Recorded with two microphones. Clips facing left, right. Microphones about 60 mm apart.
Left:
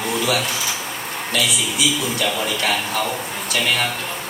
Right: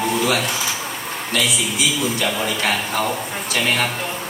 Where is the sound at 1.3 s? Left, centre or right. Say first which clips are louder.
Right 1 dB; right.